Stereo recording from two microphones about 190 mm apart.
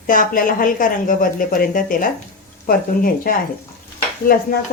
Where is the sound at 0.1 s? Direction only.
45° left (ahead or behind).